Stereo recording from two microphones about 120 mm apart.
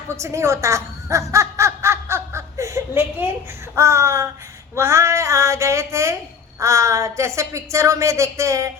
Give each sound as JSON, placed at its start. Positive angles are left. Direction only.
{"t": 0.2, "sound": "snicker", "side_deg": -25}
{"t": 3.8, "sound": "a woman's voice", "side_deg": -25}